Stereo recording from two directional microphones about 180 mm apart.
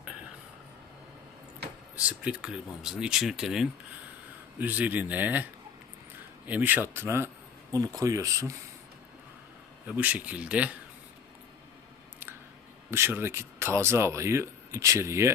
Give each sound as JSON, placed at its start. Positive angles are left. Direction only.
{"t": 2.0, "sound": "speech", "side_deg": -5}
{"t": 6.5, "sound": "speech", "side_deg": -10}
{"t": 9.8, "sound": "speech", "side_deg": -10}
{"t": 12.9, "sound": "speech", "side_deg": -15}